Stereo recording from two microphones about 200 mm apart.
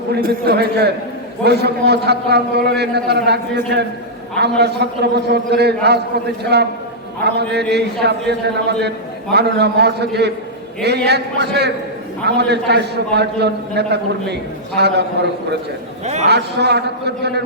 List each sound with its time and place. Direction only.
0.1 s a man's voice: 50° right (ahead or behind)